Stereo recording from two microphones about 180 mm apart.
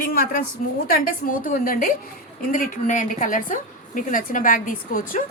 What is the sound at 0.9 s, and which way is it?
A woman's voice, 50° left (ahead or behind).